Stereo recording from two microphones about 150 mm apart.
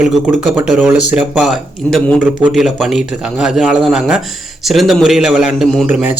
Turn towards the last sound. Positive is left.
turn(degrees=-10)  # may be behind; listen again after turning